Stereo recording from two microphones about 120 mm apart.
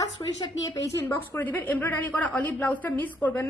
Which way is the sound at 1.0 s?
15° left (ahead or behind).